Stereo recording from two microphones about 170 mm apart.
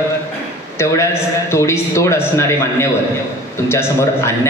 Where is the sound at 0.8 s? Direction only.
15° left (ahead or behind).